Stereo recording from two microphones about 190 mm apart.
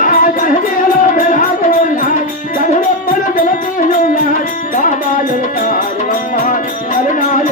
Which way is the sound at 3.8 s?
45° left (ahead or behind).